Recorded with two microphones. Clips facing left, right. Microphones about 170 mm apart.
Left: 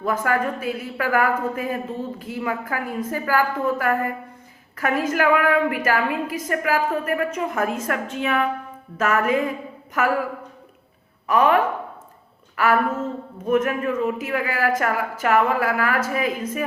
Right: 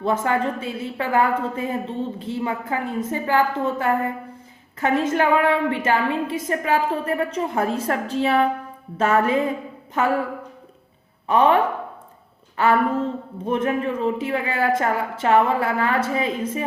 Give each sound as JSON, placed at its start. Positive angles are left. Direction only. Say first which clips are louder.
{"t": 0.0, "sound": "a woman's voice", "louder": "right 1 dB", "side_deg": -25}
{"t": 11.3, "sound": "a woman's voice", "louder": "right 1 dB", "side_deg": -30}